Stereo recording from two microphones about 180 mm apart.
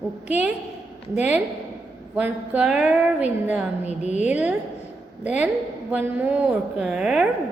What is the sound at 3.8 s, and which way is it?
Speech, 40° left (ahead or behind).